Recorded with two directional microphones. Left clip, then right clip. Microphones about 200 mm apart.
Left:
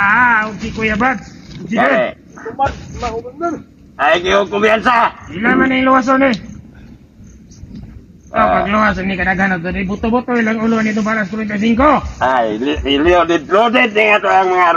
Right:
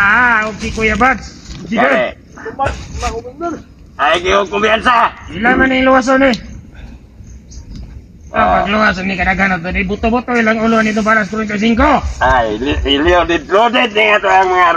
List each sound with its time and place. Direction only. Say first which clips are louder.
0.0 s a sound: right 1 dB; 50° right (ahead or behind)
2.0 s a sound: even; 10° left (ahead or behind)
3.9 s a man's voice: even; 10° left (ahead or behind)
5.4 s a man's voice: right 2 dB; 55° right (ahead or behind)
8.3 s speech: right 1 dB; 10° left (ahead or behind)
8.6 s a man's voice: right 1 dB; 55° right (ahead or behind)
12.2 s a man's voice: right 2 dB; centre (ahead or behind)